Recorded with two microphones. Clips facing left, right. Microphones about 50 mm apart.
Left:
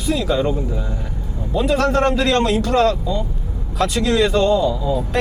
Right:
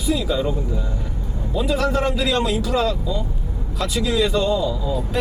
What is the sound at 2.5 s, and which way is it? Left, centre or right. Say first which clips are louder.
Speech: left 5 dB; left.